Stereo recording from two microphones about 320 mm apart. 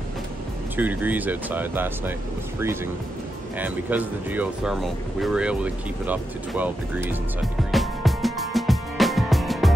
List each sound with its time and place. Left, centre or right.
0.7 s speech: centre
3.5 s speech: centre
7.7 s music: centre